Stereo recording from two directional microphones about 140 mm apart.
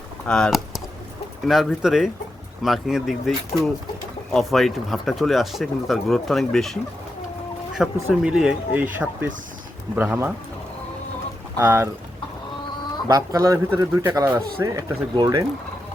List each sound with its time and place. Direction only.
0.3 s speech: 5° left (ahead or behind)
7.8 s speech: centre (ahead or behind)
11.5 s speech: 15° right (ahead or behind)
13.1 s speech: 25° right (ahead or behind)